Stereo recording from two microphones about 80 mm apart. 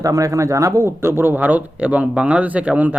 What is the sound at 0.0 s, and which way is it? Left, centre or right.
Speech, right.